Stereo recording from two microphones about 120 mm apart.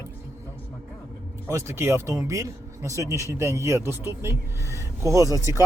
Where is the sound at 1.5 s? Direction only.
20° right (ahead or behind).